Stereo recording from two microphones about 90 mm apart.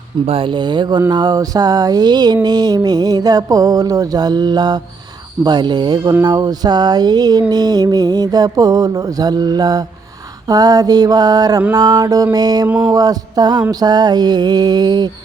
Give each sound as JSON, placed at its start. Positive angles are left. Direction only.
{"t": 0.3, "sound": "speech", "side_deg": -80}
{"t": 1.1, "sound": "mantra", "side_deg": -45}